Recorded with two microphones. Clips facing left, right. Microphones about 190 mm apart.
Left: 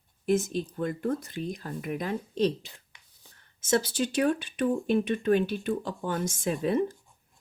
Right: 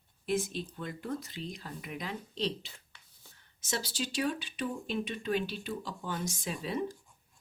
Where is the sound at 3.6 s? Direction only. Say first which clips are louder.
Left 10 dB; 50° left (ahead or behind).